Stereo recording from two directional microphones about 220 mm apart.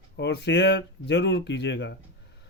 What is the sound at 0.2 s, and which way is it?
Speech, 50° left (ahead or behind).